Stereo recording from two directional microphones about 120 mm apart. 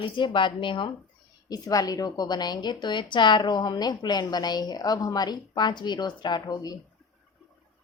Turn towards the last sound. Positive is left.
turn(degrees=30)  # may be behind; listen again after turning